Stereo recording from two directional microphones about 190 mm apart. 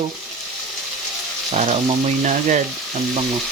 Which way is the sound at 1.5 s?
35° right (ahead or behind).